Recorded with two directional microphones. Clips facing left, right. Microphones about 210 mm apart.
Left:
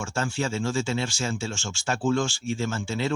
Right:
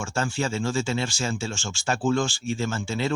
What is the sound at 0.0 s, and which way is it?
A man's voice, 35° right (ahead or behind).